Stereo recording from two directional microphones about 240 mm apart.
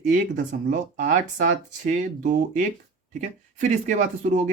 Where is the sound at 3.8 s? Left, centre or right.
Right.